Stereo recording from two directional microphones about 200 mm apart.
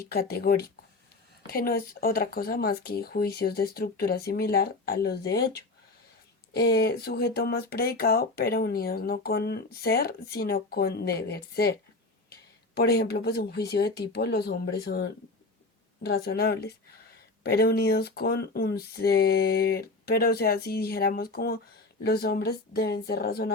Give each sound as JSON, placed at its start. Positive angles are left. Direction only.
{"t": 0.0, "sound": "speech", "side_deg": 50}
{"t": 6.6, "sound": "speech", "side_deg": 55}
{"t": 12.7, "sound": "speech", "side_deg": 55}